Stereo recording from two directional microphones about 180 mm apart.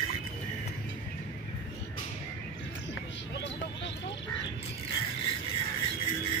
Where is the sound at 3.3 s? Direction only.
80° left.